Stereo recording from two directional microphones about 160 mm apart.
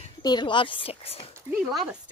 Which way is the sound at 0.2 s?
25° left (ahead or behind).